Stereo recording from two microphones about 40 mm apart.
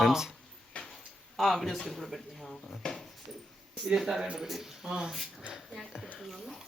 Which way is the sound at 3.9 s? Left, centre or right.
Centre.